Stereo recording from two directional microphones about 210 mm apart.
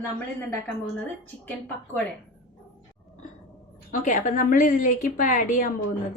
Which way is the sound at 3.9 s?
35° left (ahead or behind).